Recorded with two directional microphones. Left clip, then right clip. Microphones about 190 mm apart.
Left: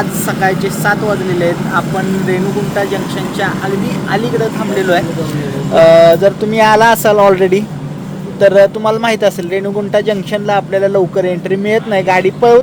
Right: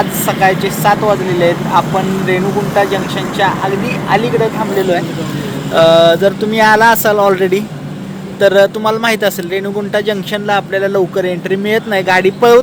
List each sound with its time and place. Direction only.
0.3 s speech: 10° left (ahead or behind)
5.7 s speech: 5° left (ahead or behind)